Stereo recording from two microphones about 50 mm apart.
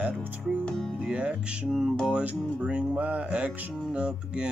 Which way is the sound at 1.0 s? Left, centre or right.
Right.